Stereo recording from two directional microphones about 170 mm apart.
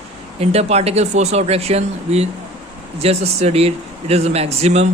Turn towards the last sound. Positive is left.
turn(degrees=-40)  # may be behind; listen again after turning